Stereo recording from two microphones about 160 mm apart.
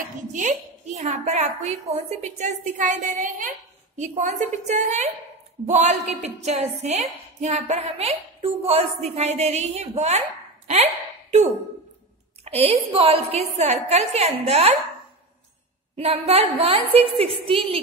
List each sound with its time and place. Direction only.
0.3 s a woman's voice: 50° right (ahead or behind)
12.4 s a woman's voice: 40° right (ahead or behind)
16.0 s a woman's voice: 40° right (ahead or behind)